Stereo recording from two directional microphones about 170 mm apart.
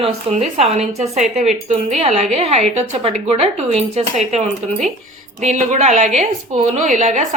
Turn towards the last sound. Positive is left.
turn(degrees=-45)  # may be behind; listen again after turning